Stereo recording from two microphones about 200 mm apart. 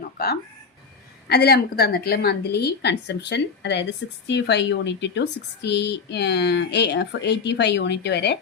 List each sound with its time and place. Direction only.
0.2 s a woman's voice: 50° left (ahead or behind)